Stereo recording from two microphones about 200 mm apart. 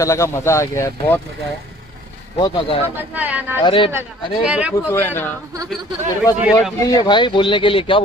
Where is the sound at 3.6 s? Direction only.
25° left (ahead or behind).